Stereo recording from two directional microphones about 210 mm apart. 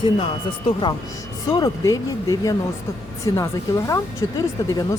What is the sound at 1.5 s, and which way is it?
Speech, 15° left (ahead or behind).